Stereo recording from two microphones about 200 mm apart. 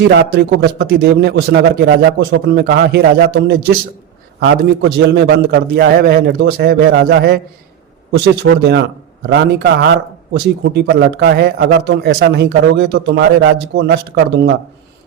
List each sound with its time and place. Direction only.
0.1 s a man's voice: 55° right (ahead or behind)
4.4 s a man's voice: 65° right (ahead or behind)